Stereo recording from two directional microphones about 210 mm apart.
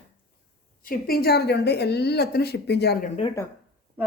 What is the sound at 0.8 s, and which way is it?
Speech, 45° left (ahead or behind).